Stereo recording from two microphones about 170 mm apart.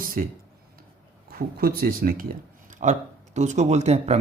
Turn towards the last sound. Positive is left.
turn(degrees=-40)  # may be behind; listen again after turning